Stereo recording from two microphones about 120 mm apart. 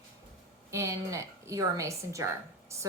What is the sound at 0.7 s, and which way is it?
A woman's voice, 25° right (ahead or behind).